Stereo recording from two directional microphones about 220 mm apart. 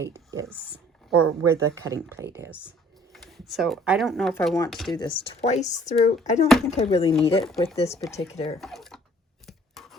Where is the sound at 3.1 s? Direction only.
Centre (ahead or behind).